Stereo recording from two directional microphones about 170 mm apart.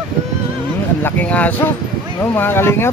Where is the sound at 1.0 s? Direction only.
10° left (ahead or behind).